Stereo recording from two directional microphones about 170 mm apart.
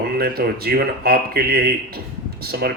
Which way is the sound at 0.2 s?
65° right (ahead or behind).